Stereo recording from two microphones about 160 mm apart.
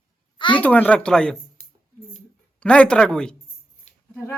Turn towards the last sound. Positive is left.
turn(degrees=45)  # may be behind; listen again after turning